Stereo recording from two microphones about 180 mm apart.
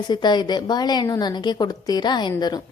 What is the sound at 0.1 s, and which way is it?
A woman's voice, 25° left (ahead or behind).